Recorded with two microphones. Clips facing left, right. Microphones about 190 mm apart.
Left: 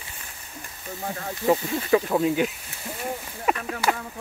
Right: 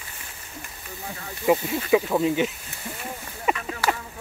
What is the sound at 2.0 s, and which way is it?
Speech, centre (ahead or behind).